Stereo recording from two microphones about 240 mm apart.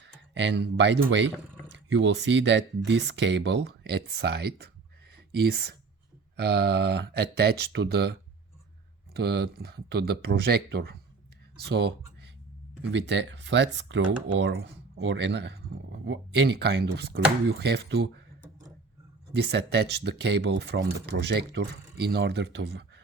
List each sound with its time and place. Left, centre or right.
0.0 s speech: right
19.4 s speech: right